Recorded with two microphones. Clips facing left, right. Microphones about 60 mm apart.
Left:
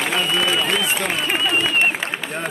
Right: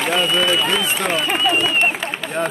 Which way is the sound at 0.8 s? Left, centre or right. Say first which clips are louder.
Right 2 dB; centre.